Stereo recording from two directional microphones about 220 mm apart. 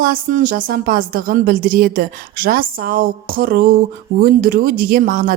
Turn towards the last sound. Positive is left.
turn(degrees=-40)  # may be behind; listen again after turning